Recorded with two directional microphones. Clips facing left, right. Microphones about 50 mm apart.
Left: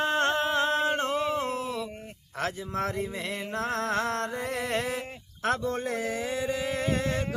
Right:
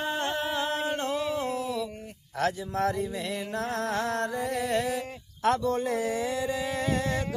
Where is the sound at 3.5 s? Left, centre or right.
Left.